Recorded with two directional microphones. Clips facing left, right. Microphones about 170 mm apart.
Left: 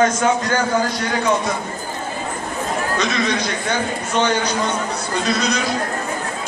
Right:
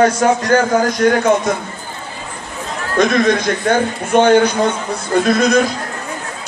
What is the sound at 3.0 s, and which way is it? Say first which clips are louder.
A man's voice: right 12 dB; 50° right (ahead or behind).